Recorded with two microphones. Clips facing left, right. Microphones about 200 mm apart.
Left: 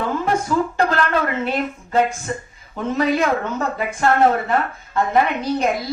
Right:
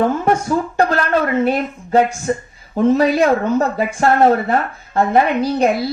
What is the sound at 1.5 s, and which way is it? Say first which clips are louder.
Speech: right 5 dB; 40° right (ahead or behind).